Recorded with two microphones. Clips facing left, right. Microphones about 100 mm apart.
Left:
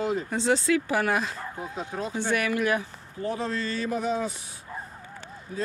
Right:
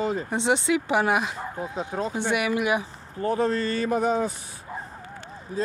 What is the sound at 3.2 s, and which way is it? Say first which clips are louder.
A man's voice: right 6 dB; 45° right (ahead or behind).